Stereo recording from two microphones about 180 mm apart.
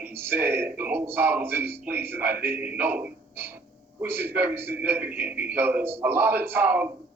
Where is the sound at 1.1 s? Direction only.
10° right (ahead or behind).